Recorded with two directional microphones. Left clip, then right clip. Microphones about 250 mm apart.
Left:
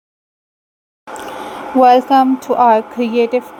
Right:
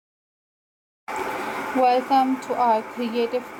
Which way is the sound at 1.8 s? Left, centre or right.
Left.